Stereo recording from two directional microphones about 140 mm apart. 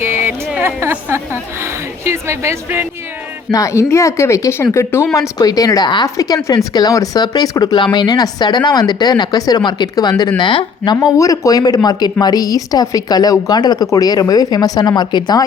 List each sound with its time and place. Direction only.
0.0 s a woman's voice: 15° right (ahead or behind)
3.5 s speech: 20° left (ahead or behind)